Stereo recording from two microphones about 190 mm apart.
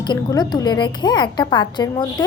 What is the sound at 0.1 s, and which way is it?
A woman's voice, 20° left (ahead or behind).